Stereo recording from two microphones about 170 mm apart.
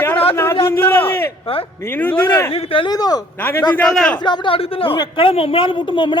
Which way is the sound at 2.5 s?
35° left (ahead or behind).